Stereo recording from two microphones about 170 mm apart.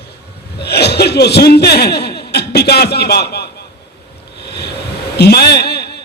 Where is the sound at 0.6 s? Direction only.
70° left (ahead or behind).